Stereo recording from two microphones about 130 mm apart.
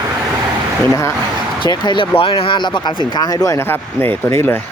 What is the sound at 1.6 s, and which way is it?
Speech, 35° left (ahead or behind).